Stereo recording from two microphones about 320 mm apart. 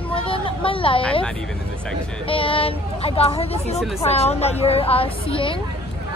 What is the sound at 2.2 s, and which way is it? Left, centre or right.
Speech, centre.